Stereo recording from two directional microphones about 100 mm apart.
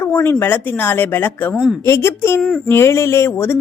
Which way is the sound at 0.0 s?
25° left (ahead or behind).